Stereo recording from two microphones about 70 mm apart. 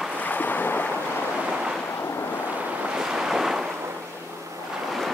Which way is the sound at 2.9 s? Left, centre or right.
Centre.